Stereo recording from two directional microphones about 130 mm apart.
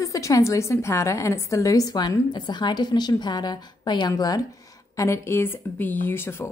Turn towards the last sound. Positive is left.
turn(degrees=20)  # may be behind; listen again after turning